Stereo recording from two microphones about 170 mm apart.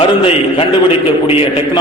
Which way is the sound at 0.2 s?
30° left (ahead or behind).